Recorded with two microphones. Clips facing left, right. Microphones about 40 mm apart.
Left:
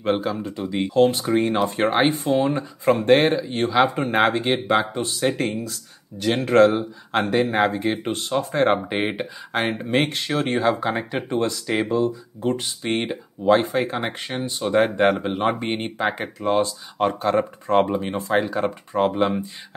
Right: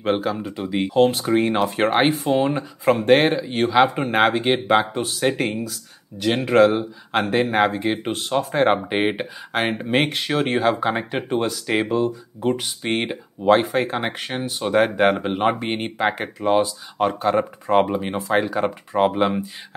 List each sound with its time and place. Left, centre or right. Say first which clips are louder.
0.0 s speech: right 1 dB; centre
3.2 s speech: right 1 dB; right
7.5 s speech: right 1 dB; centre
11.7 s speech: right 1 dB; centre
15.5 s speech: even; centre